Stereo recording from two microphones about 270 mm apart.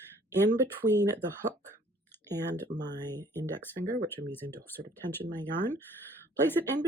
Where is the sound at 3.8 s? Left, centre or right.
Right.